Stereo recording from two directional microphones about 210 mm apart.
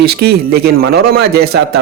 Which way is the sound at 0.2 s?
50° right (ahead or behind).